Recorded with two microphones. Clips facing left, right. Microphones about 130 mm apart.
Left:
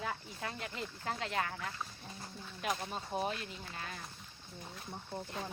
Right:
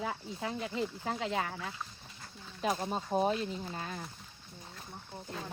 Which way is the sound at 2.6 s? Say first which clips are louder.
Right 5 dB; 30° right (ahead or behind).